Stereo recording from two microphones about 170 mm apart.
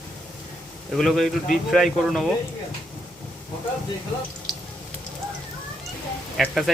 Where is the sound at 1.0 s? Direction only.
Centre (ahead or behind).